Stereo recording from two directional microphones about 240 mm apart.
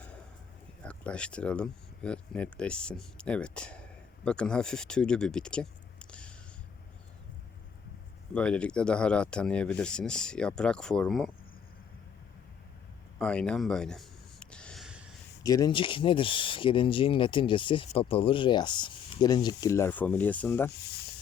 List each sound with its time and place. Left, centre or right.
0.8 s speech: centre
8.3 s speech: centre
13.1 s a sound: centre
15.4 s speech: centre